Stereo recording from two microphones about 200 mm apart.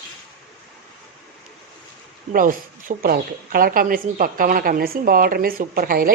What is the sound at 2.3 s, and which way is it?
Speech, 45° right (ahead or behind).